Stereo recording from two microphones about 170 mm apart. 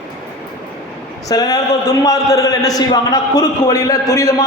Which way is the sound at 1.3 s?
20° left (ahead or behind).